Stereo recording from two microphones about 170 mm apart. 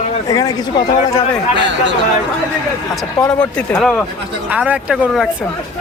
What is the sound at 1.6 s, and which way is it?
Speech, 90° right.